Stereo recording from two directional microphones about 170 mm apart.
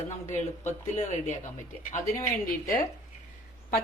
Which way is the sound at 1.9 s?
45° left (ahead or behind).